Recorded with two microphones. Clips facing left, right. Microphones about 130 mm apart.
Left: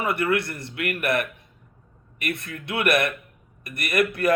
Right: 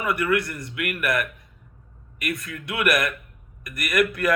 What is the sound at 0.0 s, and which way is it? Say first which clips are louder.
A man's voice: even; 25° left (ahead or behind).